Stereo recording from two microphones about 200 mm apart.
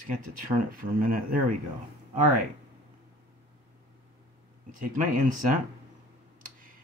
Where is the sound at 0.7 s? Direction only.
45° right (ahead or behind).